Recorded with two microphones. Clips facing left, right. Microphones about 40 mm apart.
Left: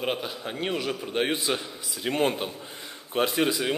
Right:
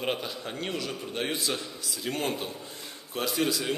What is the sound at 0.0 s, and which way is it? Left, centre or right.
A man's voice, centre.